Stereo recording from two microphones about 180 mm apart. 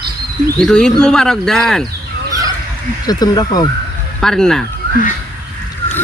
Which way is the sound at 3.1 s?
20° left (ahead or behind).